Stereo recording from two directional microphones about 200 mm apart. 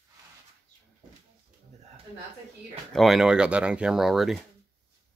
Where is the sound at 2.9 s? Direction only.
Centre (ahead or behind).